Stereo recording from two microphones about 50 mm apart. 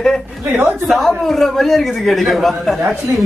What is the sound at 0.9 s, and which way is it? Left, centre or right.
Speech, centre.